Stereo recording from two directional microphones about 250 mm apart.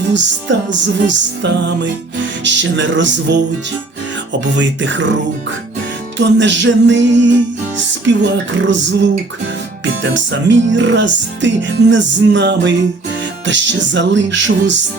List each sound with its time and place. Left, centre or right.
0.1 s music: right
6.1 s music: right